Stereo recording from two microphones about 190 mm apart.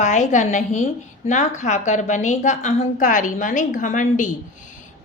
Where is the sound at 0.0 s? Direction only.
40° left (ahead or behind).